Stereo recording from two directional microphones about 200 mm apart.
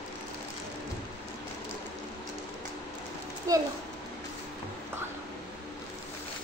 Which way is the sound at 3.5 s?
15° right (ahead or behind).